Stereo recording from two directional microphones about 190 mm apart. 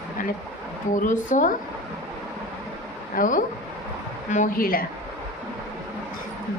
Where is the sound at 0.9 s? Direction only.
45° left (ahead or behind).